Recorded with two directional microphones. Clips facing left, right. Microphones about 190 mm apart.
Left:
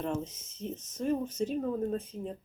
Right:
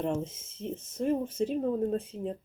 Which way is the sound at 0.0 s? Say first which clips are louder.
Right 3 dB; 25° right (ahead or behind).